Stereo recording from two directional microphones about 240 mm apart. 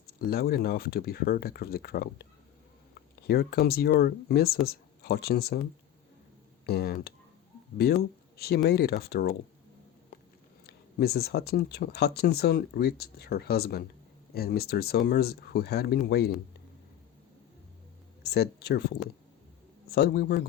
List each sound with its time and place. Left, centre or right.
0.1 s speech: left
3.2 s speech: left
6.7 s speech: left
10.7 s speech: left
18.2 s speech: left